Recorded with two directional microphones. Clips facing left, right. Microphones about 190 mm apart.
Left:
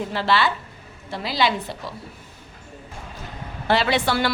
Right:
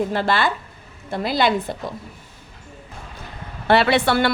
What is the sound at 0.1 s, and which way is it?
A woman's voice, 50° right (ahead or behind).